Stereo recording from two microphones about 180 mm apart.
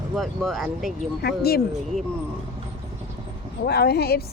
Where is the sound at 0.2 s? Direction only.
Centre (ahead or behind).